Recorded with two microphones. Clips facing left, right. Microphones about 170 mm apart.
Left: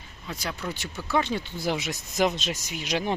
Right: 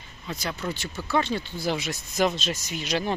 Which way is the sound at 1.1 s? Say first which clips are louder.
Right 1 dB; 15° left (ahead or behind).